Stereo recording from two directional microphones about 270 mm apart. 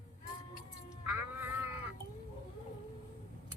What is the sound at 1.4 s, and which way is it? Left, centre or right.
Music, centre.